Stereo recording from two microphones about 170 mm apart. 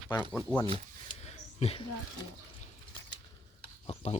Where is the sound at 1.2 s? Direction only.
40° left (ahead or behind).